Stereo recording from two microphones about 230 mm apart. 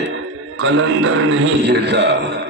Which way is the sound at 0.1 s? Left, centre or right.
Right.